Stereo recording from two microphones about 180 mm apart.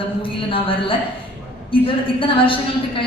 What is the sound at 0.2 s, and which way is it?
A woman's voice, 30° left (ahead or behind).